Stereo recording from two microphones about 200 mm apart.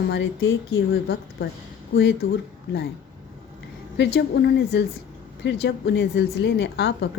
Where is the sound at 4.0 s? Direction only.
55° left (ahead or behind).